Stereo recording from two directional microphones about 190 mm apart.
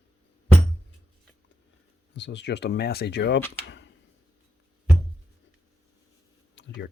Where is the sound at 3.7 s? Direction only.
70° left (ahead or behind).